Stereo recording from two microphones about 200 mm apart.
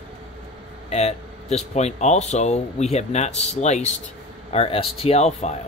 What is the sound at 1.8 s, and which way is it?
Speech, 35° left (ahead or behind).